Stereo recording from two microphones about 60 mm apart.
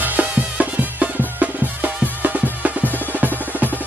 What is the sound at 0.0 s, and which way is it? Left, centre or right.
Music, right.